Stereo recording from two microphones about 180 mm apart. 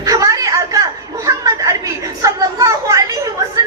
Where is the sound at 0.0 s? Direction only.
20° right (ahead or behind).